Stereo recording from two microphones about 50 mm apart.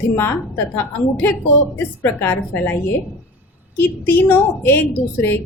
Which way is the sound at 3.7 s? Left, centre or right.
Left.